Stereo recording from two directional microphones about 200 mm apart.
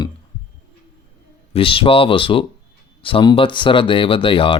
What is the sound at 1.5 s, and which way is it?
Speech, 25° left (ahead or behind).